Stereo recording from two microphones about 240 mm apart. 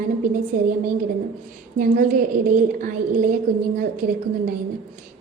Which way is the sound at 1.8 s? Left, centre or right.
Right.